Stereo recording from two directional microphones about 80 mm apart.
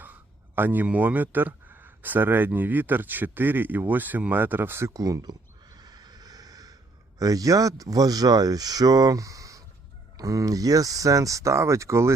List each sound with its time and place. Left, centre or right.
0.0 s speech: right
4.9 s a sound: right
7.2 s speech: right